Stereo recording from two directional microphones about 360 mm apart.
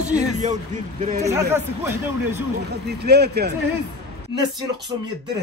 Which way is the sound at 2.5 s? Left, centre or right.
Right.